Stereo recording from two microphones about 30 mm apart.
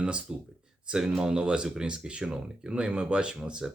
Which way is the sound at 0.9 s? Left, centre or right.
Right.